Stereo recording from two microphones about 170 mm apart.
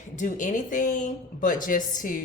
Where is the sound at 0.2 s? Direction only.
50° left (ahead or behind).